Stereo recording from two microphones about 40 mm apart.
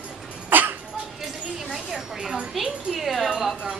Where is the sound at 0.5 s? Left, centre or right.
Right.